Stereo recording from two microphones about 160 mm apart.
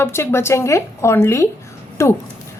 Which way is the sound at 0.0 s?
15° left (ahead or behind).